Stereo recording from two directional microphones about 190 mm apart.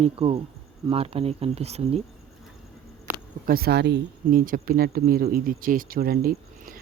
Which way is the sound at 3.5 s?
55° right (ahead or behind).